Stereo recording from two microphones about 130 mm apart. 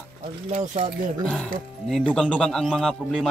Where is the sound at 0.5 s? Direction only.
65° right (ahead or behind).